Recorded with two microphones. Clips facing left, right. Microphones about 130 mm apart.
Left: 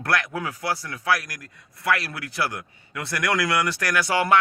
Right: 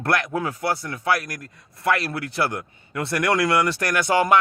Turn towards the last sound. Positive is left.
turn(degrees=-20)  # may be behind; listen again after turning